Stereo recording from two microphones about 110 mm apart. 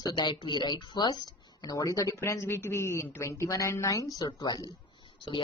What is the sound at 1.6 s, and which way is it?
Speech, 30° left (ahead or behind).